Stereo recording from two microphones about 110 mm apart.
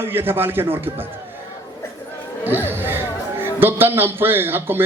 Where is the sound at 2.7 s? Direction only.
20° right (ahead or behind).